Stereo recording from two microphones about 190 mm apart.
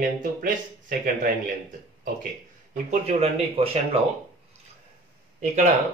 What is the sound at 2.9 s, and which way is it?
Speech, 35° right (ahead or behind).